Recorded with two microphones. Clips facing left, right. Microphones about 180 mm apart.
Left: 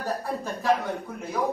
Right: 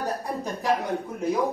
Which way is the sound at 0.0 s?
15° right (ahead or behind).